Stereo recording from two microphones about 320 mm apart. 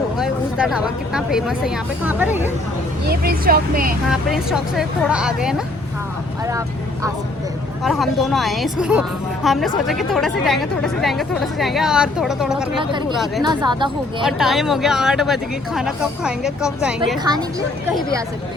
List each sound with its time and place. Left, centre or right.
0.2 s speech: centre
3.1 s speech: right
4.1 s a woman's voice: centre
7.9 s a woman's voice: centre
13.4 s speech: centre
14.3 s a woman's voice: centre